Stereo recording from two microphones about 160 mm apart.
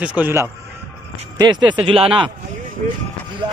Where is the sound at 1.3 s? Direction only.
25° right (ahead or behind).